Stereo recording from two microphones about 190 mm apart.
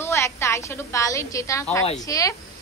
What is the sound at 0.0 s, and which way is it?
A woman's voice, 15° left (ahead or behind).